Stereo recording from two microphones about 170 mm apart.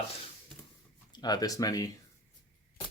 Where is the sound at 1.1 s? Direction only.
25° left (ahead or behind).